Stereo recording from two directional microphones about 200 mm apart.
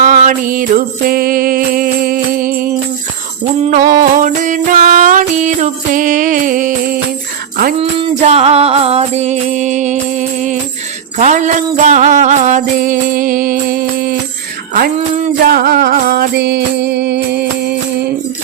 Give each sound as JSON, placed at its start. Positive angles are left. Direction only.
{"t": 0.0, "sound": "music", "side_deg": -40}
{"t": 7.8, "sound": "music", "side_deg": -30}